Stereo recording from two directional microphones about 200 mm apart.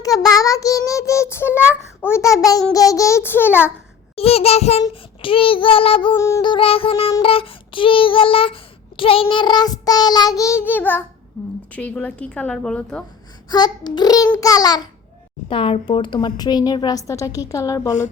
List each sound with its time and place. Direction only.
0.0 s a child's voice: 15° left (ahead or behind)
4.1 s child singing: 30° left (ahead or behind); by 11.0 s 10° left (ahead or behind)
11.4 s a woman's voice: 5° left (ahead or behind)
13.5 s child singing: 20° left (ahead or behind)
14.3 s a child's voice: 15° left (ahead or behind)
15.4 s child singing: 25° left (ahead or behind)